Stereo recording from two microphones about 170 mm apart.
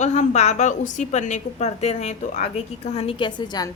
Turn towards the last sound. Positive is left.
turn(degrees=25)  # may be behind; listen again after turning